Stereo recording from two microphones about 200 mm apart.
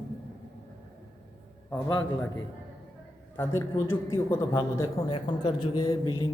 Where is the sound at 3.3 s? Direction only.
10° left (ahead or behind).